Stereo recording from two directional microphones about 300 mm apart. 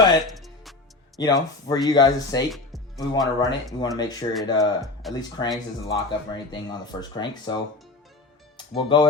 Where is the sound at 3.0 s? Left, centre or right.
Centre.